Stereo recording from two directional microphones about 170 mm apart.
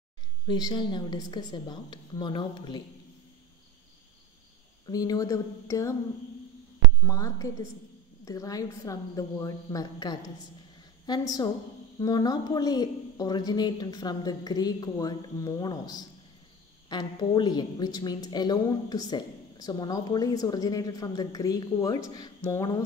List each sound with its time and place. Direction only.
0.5 s a woman's voice: 25° left (ahead or behind)
4.8 s a woman's voice: 20° left (ahead or behind)
7.0 s a woman's voice: 20° left (ahead or behind)